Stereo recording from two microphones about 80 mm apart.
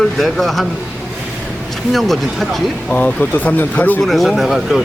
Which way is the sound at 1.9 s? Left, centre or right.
Centre.